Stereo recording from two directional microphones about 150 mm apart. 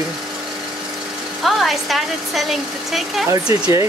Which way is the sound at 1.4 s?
Centre (ahead or behind).